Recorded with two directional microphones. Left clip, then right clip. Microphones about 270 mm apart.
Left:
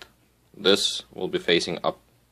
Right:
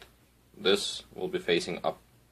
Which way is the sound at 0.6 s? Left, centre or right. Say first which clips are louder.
Left 6 dB; left.